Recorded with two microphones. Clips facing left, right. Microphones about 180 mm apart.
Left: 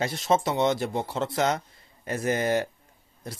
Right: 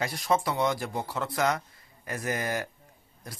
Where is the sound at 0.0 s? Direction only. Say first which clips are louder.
Left 3 dB; 25° left (ahead or behind).